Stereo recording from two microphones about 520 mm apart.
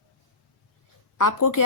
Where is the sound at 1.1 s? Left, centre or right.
Left.